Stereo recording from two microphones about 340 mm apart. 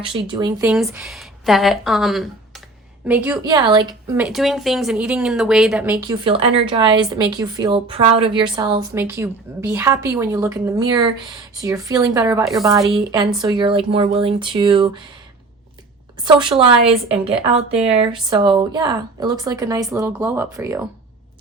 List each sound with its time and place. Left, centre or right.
0.0 s a woman's voice: centre
16.2 s speech: centre